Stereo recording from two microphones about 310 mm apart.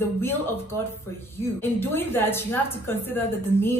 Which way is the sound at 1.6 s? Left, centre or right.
Centre.